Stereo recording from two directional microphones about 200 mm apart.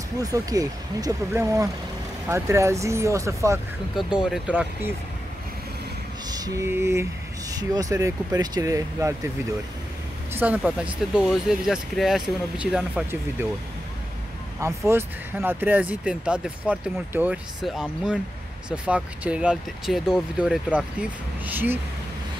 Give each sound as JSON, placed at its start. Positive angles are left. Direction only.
{"t": 0.2, "sound": "speech", "side_deg": -15}
{"t": 3.9, "sound": "speech", "side_deg": -5}
{"t": 6.3, "sound": "lullaby", "side_deg": -15}
{"t": 7.5, "sound": "speech", "side_deg": -20}
{"t": 10.3, "sound": "speech", "side_deg": -10}
{"t": 14.9, "sound": "speech", "side_deg": -10}